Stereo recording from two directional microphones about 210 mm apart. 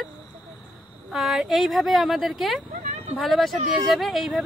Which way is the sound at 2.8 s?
35° right (ahead or behind).